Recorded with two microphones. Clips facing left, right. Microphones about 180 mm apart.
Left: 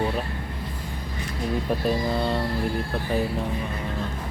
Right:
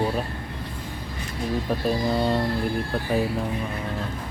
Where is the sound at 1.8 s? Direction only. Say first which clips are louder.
Right 3 dB; centre (ahead or behind).